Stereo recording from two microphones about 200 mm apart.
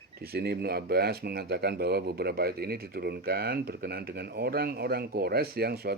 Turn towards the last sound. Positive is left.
turn(degrees=-50)  # may be behind; listen again after turning